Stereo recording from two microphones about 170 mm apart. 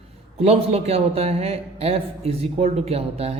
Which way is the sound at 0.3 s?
35° right (ahead or behind).